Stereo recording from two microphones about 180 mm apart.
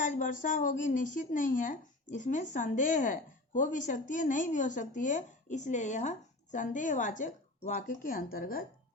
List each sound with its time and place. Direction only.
0.0 s speech: 45° left (ahead or behind)